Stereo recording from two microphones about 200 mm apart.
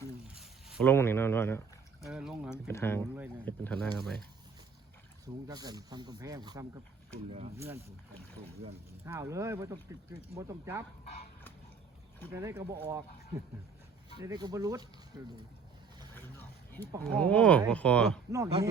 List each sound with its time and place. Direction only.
0.3 s a sound: centre (ahead or behind)
0.9 s speech: 10° left (ahead or behind)
2.0 s speech: centre (ahead or behind)
2.6 s speech: 10° left (ahead or behind)
5.2 s speech: 20° right (ahead or behind)
9.0 s speech: 15° right (ahead or behind)
12.3 s speech: 15° right (ahead or behind)
14.2 s speech: 20° right (ahead or behind)
16.1 s a sound: 10° left (ahead or behind)
17.0 s speech: 5° left (ahead or behind)
18.3 s speech: 15° right (ahead or behind)